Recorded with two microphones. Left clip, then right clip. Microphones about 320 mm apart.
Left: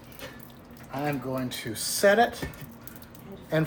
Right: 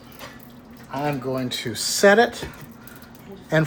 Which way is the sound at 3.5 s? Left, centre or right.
Right.